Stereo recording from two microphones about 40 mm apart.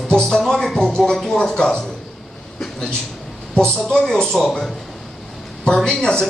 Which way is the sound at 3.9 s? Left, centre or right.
Centre.